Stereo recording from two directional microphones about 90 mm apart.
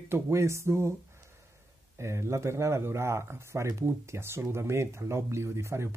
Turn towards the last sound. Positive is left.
turn(degrees=-30)  # may be behind; listen again after turning